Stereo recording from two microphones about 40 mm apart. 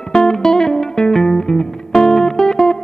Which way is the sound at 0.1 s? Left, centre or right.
Centre.